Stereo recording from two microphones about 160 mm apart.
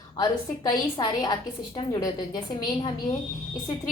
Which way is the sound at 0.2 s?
25° left (ahead or behind).